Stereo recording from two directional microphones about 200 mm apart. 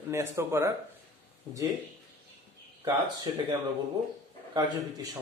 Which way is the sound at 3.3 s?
25° right (ahead or behind).